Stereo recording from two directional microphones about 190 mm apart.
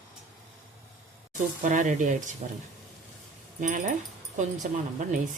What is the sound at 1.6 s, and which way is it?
Speech, 40° right (ahead or behind).